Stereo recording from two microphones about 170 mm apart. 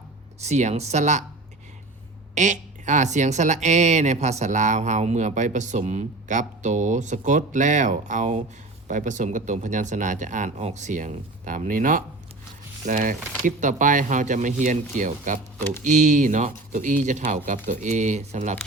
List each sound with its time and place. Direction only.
0.3 s speech: 40° right (ahead or behind)
2.3 s a woman's voice: 45° right (ahead or behind)